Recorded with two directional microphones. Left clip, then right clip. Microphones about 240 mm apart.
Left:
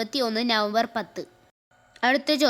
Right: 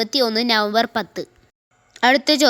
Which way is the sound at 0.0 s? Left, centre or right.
Centre.